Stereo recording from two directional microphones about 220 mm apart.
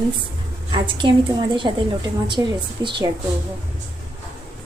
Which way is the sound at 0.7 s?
20° right (ahead or behind).